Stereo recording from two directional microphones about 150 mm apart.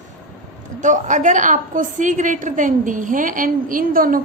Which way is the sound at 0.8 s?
55° right (ahead or behind).